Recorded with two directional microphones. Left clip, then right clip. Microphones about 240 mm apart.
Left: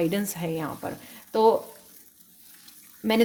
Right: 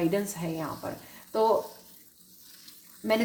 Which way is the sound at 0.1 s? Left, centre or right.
Left.